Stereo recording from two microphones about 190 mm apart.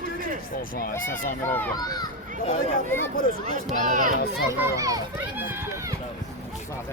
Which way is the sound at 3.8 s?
45° right (ahead or behind).